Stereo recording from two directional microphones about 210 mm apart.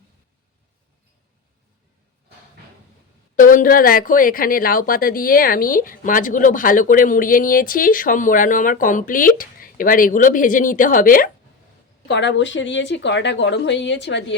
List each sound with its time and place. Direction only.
3.3 s speech: 40° left (ahead or behind)
12.0 s speech: 55° left (ahead or behind)